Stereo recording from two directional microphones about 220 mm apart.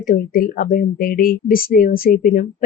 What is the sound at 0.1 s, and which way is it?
Speech, 40° left (ahead or behind).